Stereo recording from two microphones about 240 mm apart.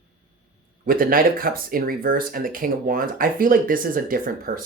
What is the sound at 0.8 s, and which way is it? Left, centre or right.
Speech, right.